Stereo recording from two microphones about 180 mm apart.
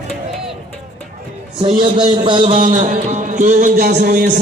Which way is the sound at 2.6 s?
45° right (ahead or behind).